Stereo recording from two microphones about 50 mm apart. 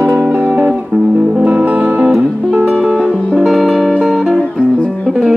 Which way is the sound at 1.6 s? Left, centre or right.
Right.